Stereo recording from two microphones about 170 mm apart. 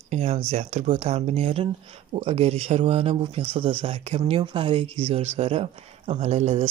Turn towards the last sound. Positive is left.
turn(degrees=-45)  # may be behind; listen again after turning